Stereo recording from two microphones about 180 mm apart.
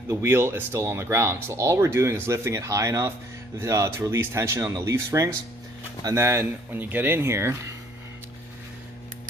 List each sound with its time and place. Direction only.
0.1 s speech: 15° right (ahead or behind)